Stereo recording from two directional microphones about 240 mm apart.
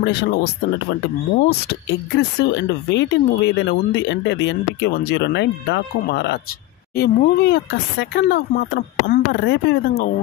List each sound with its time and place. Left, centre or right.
0.0 s speech: left